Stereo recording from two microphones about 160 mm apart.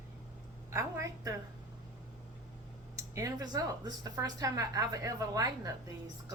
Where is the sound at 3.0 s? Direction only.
20° right (ahead or behind).